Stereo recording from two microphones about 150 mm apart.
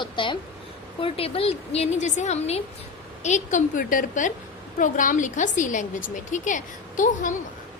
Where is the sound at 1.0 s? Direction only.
40° left (ahead or behind).